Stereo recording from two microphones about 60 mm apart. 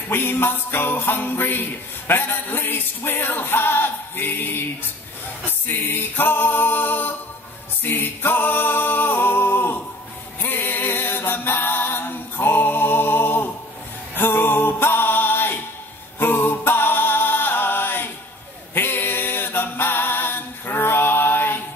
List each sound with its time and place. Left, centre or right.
0.1 s music: left
5.7 s music: left
7.8 s singing: left
10.4 s a capella: left
14.1 s music: left
18.8 s a capella: left